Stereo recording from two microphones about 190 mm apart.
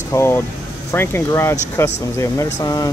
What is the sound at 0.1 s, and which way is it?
Speech, 15° left (ahead or behind).